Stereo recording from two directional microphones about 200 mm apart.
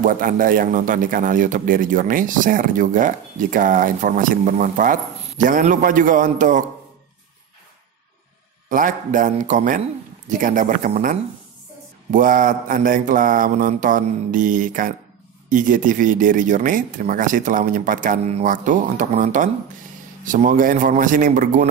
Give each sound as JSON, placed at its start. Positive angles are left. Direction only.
{"t": 0.0, "sound": "a man's voice", "side_deg": -45}
{"t": 8.6, "sound": "a man's voice", "side_deg": -40}
{"t": 12.1, "sound": "mantra", "side_deg": -45}
{"t": 15.5, "sound": "a man's voice", "side_deg": -40}